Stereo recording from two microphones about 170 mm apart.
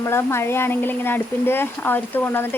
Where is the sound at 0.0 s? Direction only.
15° left (ahead or behind).